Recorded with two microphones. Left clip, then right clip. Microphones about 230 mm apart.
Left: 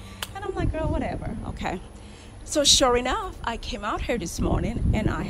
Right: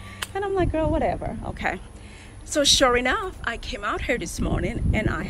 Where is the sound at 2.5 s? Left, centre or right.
Left.